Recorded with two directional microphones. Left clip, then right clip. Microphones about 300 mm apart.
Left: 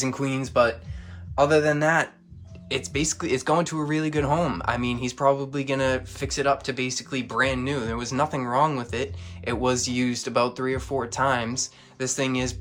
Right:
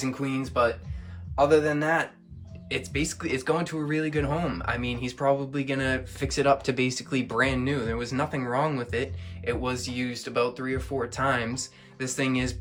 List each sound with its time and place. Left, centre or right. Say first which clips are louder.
0.0 s a man's voice: left 3 dB; left
2.6 s speech: left 3 dB; centre